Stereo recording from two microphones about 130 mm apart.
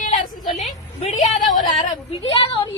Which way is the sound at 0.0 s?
80° left.